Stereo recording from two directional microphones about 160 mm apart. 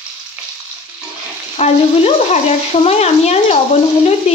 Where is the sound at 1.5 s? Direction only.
45° left (ahead or behind).